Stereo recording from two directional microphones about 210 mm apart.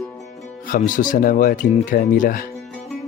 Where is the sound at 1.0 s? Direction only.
40° left (ahead or behind).